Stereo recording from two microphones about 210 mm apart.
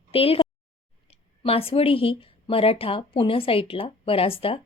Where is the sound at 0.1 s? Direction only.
25° left (ahead or behind).